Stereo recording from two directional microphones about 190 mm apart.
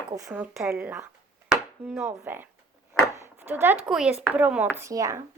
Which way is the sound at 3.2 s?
10° right (ahead or behind).